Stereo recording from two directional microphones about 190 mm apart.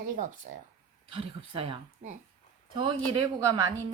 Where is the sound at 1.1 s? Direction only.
30° right (ahead or behind).